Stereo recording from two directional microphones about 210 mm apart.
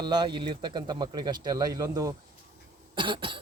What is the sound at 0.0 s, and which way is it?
Speech, 20° right (ahead or behind).